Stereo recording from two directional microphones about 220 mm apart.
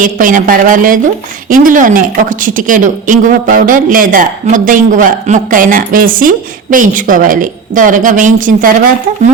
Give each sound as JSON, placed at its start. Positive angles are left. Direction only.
{"t": 0.0, "sound": "speech", "side_deg": -35}